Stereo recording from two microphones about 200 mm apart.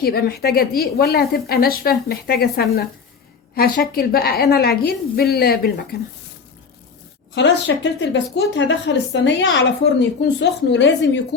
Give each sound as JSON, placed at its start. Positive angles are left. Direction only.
{"t": 0.0, "sound": "a woman's voice", "side_deg": 50}
{"t": 7.3, "sound": "speech", "side_deg": 65}